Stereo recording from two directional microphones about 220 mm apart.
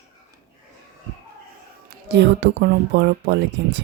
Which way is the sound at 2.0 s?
50° right (ahead or behind).